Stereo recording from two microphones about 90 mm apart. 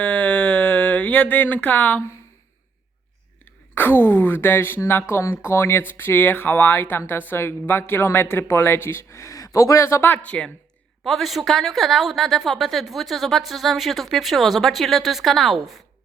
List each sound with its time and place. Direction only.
0.0 s a sound: 15° left (ahead or behind)
3.8 s speech: 25° left (ahead or behind)
11.0 s a woman's voice: centre (ahead or behind)